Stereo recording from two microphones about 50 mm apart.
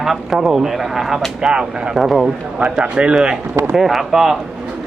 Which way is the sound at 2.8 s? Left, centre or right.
Right.